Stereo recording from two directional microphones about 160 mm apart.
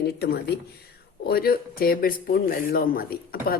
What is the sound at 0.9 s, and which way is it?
Speech, 75° left (ahead or behind).